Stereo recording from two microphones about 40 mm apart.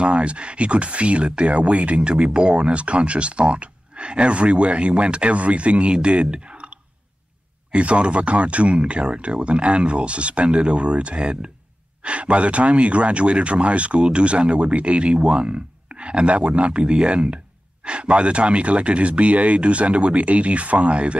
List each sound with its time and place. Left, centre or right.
0.0 s speech: right